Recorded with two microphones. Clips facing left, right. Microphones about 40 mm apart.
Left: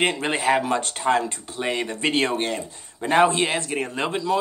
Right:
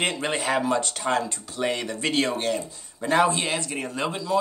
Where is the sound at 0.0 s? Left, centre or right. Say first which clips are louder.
Left 4 dB; left.